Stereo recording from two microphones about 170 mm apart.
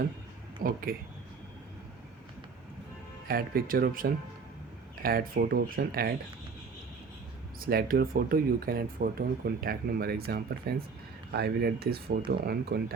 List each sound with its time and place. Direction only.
0.6 s speech: 60° right (ahead or behind)
3.2 s speech: 60° right (ahead or behind)
7.6 s speech: 60° right (ahead or behind)